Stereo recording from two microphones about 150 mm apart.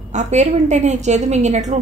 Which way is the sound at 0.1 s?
50° right (ahead or behind).